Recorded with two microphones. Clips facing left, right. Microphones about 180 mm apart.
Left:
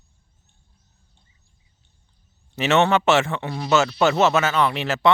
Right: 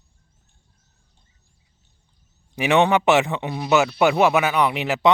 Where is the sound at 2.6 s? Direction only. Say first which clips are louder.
Right 1 dB; 15° right (ahead or behind).